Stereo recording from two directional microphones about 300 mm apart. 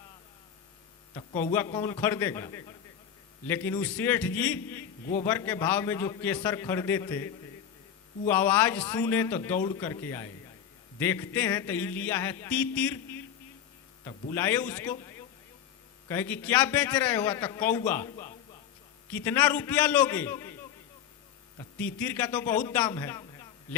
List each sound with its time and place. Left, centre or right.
1.5 s a man's voice: centre
8.3 s a man's voice: centre
16.0 s a man's voice: centre
21.6 s a man's voice: centre